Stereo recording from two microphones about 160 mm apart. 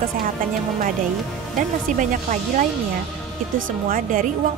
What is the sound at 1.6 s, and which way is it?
A woman's voice, 55° right (ahead or behind).